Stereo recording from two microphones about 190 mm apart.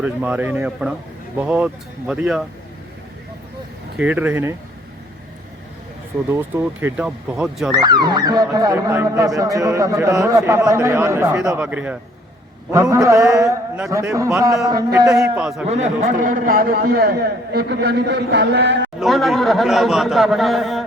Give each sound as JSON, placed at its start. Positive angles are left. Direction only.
{"t": 0.0, "sound": "speech", "side_deg": -10}
{"t": 3.9, "sound": "speech", "side_deg": -5}
{"t": 6.3, "sound": "speech", "side_deg": -15}
{"t": 7.7, "sound": "speech", "side_deg": -20}
{"t": 15.0, "sound": "speech", "side_deg": -5}
{"t": 15.7, "sound": "a man's voice", "side_deg": -40}
{"t": 18.9, "sound": "speech", "side_deg": 0}